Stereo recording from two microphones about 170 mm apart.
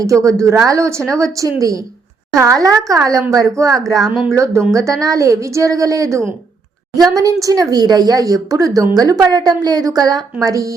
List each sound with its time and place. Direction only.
0.0 s a woman's voice: 20° right (ahead or behind)